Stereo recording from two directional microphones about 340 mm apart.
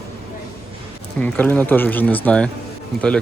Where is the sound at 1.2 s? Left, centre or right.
Centre.